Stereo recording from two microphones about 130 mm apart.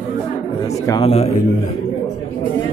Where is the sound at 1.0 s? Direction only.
50° left (ahead or behind).